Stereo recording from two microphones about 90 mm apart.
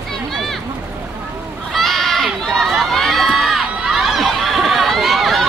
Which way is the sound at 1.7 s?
Centre (ahead or behind).